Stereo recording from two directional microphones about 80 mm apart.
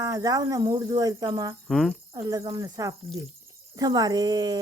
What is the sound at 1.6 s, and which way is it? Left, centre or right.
Speech, centre.